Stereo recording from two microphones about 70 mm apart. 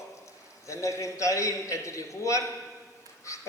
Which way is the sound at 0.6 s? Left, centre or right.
Left.